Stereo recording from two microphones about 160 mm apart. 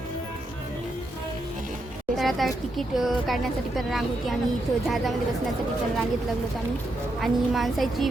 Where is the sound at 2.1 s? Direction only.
Centre (ahead or behind).